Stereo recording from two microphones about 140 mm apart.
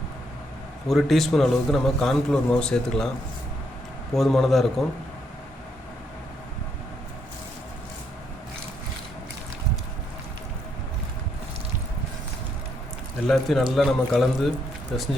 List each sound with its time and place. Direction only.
0.9 s a man's voice: centre (ahead or behind)
4.1 s a man's voice: centre (ahead or behind)
13.2 s a man's voice: centre (ahead or behind)